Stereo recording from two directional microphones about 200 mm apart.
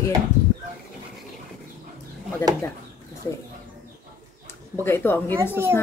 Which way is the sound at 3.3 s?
15° left (ahead or behind).